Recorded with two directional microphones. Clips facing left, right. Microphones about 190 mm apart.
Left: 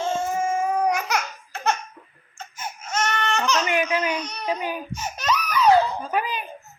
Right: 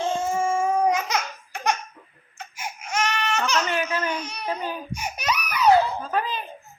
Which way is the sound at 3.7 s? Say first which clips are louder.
Left 3 dB; 15° left (ahead or behind).